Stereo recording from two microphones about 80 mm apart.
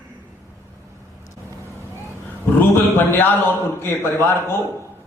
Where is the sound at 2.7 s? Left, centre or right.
Left.